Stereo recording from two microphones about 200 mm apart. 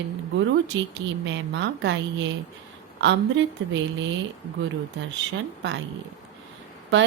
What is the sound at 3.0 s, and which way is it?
Speech, 65° right (ahead or behind).